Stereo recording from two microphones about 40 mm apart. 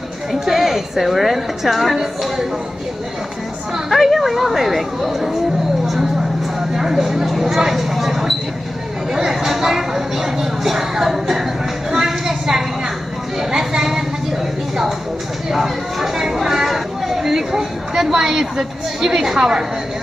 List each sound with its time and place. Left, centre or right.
0.3 s a woman's voice: centre
3.9 s speech: centre
6.7 s speech: centre
11.9 s a sound: centre
15.5 s speech: centre